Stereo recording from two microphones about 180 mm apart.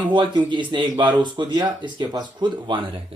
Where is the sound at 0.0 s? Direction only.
25° right (ahead or behind).